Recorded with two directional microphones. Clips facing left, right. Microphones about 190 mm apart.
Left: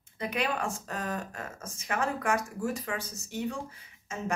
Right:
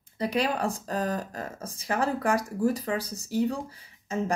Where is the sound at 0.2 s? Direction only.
35° right (ahead or behind).